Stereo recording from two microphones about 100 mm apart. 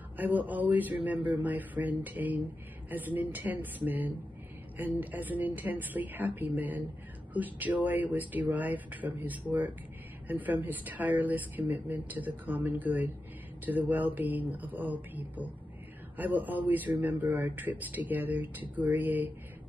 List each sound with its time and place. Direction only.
0.2 s speech: 15° right (ahead or behind)